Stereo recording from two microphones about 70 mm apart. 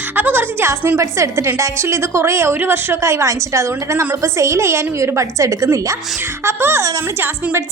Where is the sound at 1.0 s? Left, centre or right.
Right.